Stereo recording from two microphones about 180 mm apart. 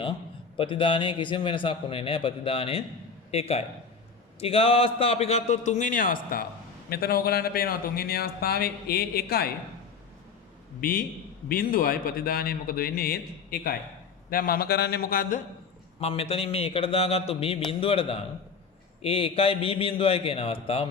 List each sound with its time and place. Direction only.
0.5 s a man's voice: 30° left (ahead or behind); by 9.5 s 60° left (ahead or behind)
10.8 s a man's voice: 55° left (ahead or behind)
16.0 s a man's voice: 35° left (ahead or behind)